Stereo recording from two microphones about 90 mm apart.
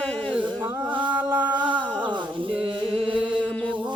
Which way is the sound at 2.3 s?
70° right (ahead or behind).